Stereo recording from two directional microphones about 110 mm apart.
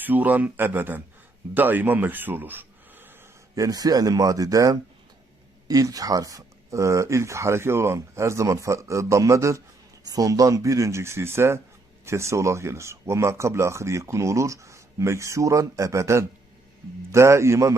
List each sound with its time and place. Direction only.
0.0 s speech: 15° right (ahead or behind)
3.5 s speech: 35° right (ahead or behind)